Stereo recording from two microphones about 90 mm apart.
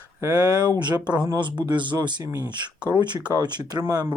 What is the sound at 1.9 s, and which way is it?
Speech, 40° right (ahead or behind).